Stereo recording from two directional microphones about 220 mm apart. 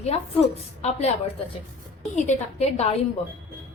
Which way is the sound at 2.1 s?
30° left (ahead or behind).